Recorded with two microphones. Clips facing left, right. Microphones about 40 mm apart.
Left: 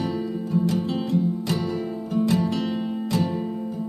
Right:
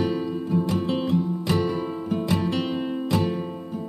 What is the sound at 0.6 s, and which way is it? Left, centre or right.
Music, right.